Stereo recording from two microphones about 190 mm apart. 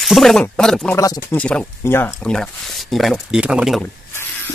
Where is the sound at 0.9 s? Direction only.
15° left (ahead or behind); by 3.8 s 5° right (ahead or behind).